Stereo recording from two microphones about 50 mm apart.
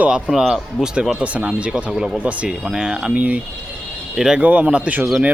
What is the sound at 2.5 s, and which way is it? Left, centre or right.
Speech, centre.